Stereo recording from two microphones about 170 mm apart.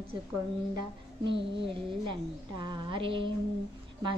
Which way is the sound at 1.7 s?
25° right (ahead or behind).